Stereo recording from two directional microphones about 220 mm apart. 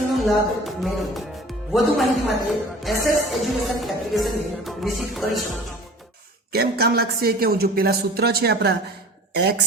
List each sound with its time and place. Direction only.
0.1 s speech: centre (ahead or behind)
2.5 s music: centre (ahead or behind)
6.5 s speech: 45° right (ahead or behind)